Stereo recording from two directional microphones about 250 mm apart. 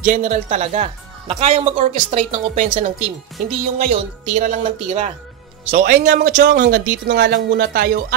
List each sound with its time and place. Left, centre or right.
0.0 s speech: right